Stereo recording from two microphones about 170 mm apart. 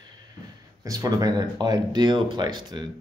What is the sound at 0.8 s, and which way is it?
Speech, 20° right (ahead or behind).